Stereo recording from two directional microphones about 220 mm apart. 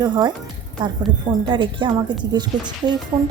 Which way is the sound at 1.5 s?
20° right (ahead or behind).